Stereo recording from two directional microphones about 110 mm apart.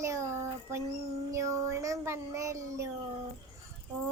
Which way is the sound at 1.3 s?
30° right (ahead or behind).